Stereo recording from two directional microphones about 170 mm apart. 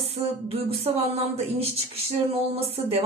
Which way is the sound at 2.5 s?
35° right (ahead or behind).